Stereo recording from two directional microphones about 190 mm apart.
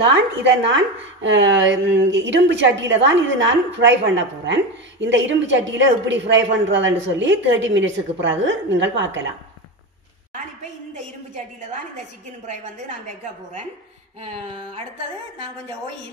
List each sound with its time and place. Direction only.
0.1 s a woman's voice: 65° right (ahead or behind)
12.7 s speech: 40° right (ahead or behind)
14.2 s speech: 30° right (ahead or behind)